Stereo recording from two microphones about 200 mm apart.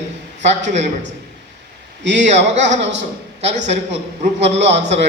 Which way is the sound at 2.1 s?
35° right (ahead or behind).